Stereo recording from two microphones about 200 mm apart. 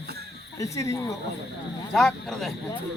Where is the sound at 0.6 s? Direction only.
15° left (ahead or behind).